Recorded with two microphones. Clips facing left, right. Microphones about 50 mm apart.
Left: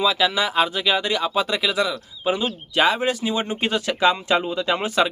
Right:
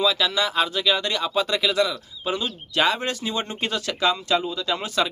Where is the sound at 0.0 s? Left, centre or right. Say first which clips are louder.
Left 2 dB; centre.